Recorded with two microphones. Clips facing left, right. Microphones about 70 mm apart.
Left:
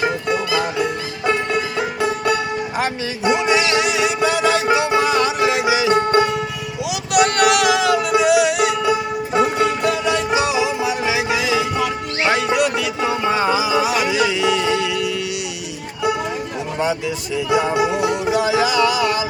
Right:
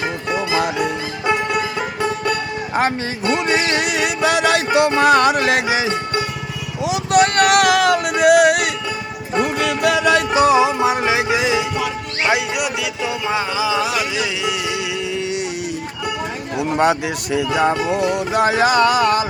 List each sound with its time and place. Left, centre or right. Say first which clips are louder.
2.0 s music: left 1 dB; centre
3.4 s music: left 1 dB; right
5.9 s music: left 7 dB; left
6.8 s a sound: right 2 dB; right
8.9 s music: left 6 dB; centre
9.6 s music: right 1 dB; right
11.8 s music: left 1 dB; centre
13.0 s music: left 3 dB; centre
13.4 s music: left 3 dB; centre
13.9 s music: left 4 dB; centre
16.7 s a sound: right 5 dB; right
17.7 s music: left 1 dB; centre
18.3 s a sound: right 3 dB; right